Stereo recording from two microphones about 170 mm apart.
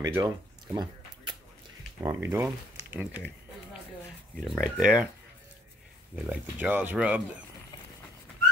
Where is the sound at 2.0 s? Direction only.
20° right (ahead or behind).